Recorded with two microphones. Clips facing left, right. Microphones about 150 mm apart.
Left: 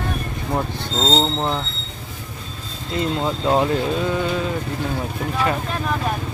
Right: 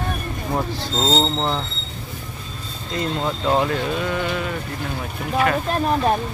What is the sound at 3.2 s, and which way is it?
Speech, 15° left (ahead or behind).